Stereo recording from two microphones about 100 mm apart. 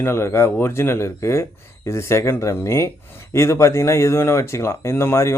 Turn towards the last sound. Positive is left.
turn(degrees=25)  # may be behind; listen again after turning